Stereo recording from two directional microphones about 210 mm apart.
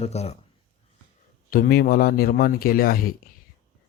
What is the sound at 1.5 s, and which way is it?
Speech, 45° left (ahead or behind).